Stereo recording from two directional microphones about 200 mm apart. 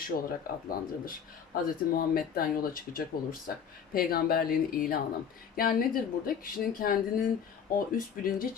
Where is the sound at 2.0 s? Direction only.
50° left (ahead or behind).